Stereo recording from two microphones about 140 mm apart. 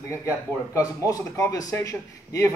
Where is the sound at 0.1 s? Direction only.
20° left (ahead or behind).